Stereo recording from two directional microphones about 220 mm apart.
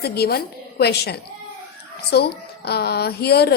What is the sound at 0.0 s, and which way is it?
A woman's voice, 45° left (ahead or behind).